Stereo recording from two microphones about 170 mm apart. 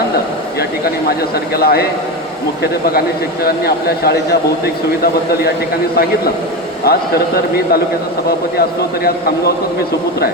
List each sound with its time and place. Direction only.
1.5 s a man's voice: 65° left (ahead or behind)
3.4 s speech: 65° left (ahead or behind)
6.8 s a man's voice: 65° left (ahead or behind)